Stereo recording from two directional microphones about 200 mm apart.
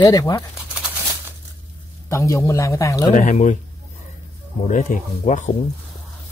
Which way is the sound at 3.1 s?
40° left (ahead or behind).